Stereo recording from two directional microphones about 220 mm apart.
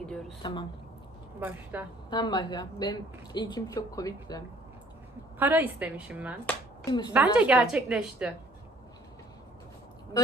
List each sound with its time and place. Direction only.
0.0 s a sound: 5° left (ahead or behind)
1.4 s a woman's voice: 10° right (ahead or behind)
2.0 s a woman's voice: 20° left (ahead or behind)
5.4 s a woman's voice: 10° right (ahead or behind)
6.8 s a woman's voice: 20° left (ahead or behind)
7.1 s a woman's voice: 5° right (ahead or behind)